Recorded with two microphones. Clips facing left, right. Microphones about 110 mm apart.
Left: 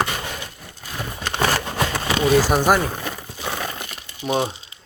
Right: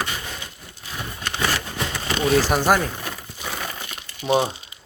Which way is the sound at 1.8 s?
90° left.